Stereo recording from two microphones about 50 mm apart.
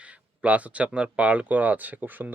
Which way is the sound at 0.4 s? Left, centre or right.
Right.